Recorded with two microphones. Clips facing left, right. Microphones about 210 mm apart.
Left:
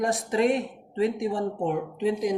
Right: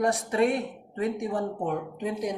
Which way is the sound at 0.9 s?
30° left (ahead or behind).